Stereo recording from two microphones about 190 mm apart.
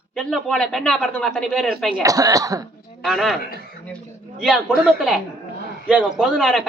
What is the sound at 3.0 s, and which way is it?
A man's voice, centre (ahead or behind).